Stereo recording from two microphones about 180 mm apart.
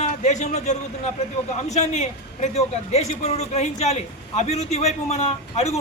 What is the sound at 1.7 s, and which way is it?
A man's voice, 40° left (ahead or behind).